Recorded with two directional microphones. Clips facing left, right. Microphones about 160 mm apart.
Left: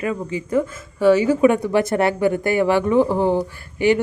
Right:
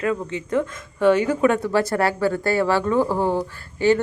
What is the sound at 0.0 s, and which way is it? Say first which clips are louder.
Speech: even; 5° left (ahead or behind).